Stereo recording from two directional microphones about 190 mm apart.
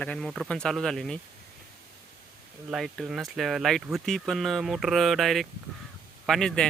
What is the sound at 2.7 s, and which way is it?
Speech, centre (ahead or behind).